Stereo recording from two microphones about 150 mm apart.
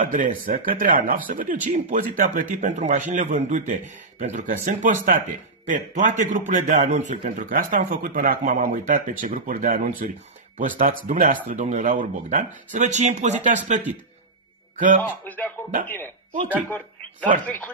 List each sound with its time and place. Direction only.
0.0 s a man's voice: 60° right (ahead or behind)
11.4 s speech: 50° right (ahead or behind)
15.0 s speech: 10° left (ahead or behind)
16.5 s speech: 10° left (ahead or behind)